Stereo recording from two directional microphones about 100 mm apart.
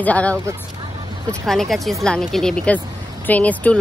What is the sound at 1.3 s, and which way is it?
Speech, 5° left (ahead or behind).